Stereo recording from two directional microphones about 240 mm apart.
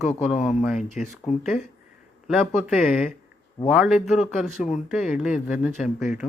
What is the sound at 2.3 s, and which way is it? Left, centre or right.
Speech, centre.